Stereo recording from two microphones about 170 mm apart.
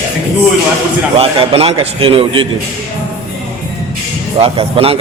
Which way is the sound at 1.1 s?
35° right (ahead or behind).